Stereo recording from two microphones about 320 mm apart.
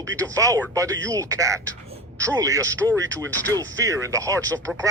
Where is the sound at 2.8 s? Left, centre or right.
Centre.